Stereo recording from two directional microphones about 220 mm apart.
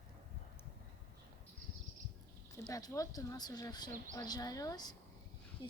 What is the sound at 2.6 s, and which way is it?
Speech, 15° left (ahead or behind).